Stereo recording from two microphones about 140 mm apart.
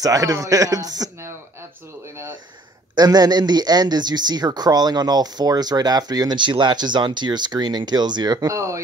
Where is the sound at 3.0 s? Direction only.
30° right (ahead or behind).